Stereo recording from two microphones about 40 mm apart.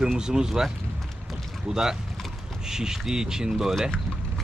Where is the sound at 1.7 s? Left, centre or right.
Centre.